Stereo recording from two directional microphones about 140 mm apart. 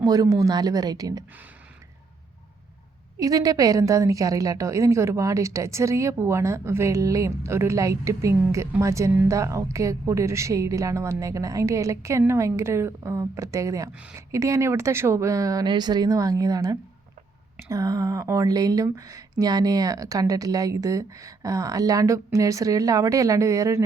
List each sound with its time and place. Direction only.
0.0 s speech: 25° right (ahead or behind)
3.2 s speech: 25° right (ahead or behind)